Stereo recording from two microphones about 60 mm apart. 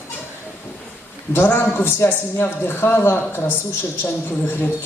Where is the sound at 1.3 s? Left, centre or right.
Left.